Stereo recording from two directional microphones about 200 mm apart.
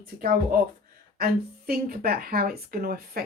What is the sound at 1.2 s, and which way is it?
A woman's voice, 50° right (ahead or behind).